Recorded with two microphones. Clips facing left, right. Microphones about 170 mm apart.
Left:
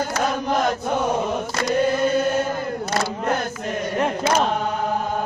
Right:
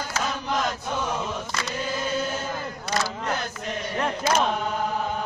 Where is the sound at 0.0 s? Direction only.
50° left (ahead or behind).